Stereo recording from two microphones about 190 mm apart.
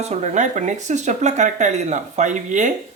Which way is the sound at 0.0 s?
35° right (ahead or behind).